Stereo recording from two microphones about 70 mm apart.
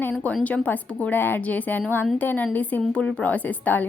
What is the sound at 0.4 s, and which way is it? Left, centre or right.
A woman's voice, left.